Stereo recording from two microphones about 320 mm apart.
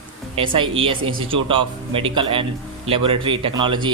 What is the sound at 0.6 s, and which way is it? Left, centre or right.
A man's voice, centre.